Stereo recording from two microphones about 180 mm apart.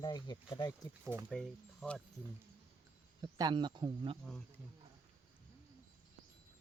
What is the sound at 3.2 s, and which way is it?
Speech, 25° right (ahead or behind).